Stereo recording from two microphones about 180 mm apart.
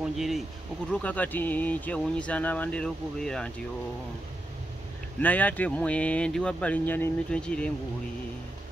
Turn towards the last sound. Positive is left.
turn(degrees=5)  # may be behind; listen again after turning